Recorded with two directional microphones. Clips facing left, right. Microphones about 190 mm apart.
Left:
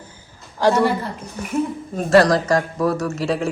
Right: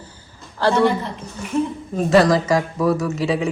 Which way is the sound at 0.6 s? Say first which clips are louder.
Even; 10° left (ahead or behind).